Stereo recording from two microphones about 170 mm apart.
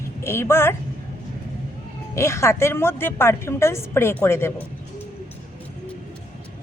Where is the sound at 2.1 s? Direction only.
15° left (ahead or behind).